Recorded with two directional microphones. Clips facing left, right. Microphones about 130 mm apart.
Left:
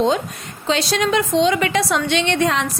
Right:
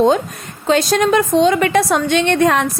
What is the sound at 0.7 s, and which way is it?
Speech, 45° right (ahead or behind).